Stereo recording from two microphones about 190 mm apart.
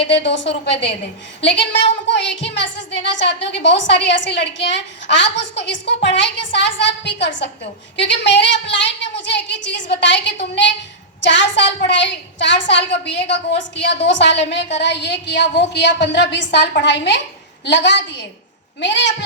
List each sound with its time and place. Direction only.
0.2 s a woman's voice: 65° left (ahead or behind)